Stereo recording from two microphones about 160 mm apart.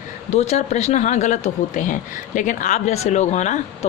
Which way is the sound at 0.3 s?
45° left (ahead or behind).